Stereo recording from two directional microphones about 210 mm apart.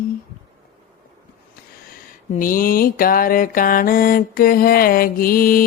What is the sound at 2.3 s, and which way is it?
Mantra, 40° left (ahead or behind).